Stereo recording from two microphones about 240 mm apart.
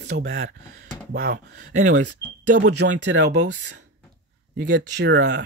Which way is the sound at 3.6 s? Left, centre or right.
Right.